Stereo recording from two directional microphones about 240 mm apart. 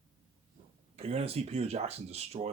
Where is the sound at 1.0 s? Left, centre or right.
Right.